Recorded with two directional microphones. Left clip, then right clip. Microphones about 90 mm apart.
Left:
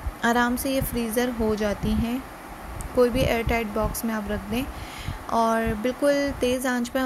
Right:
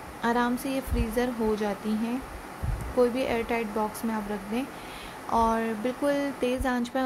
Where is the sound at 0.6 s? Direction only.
15° left (ahead or behind).